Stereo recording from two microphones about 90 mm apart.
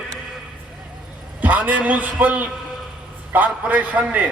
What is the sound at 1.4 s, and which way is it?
A man's voice, 15° right (ahead or behind).